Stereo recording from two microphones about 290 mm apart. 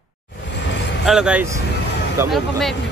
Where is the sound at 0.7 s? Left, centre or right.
Left.